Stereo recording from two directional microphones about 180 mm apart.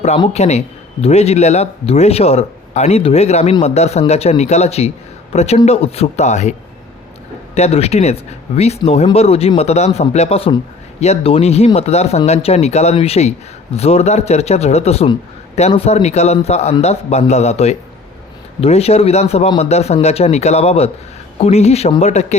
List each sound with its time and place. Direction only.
0.3 s speech: 35° left (ahead or behind)
7.5 s speech: 35° left (ahead or behind)